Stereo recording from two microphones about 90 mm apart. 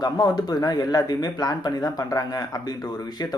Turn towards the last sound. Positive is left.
turn(degrees=50)  # may be behind; listen again after turning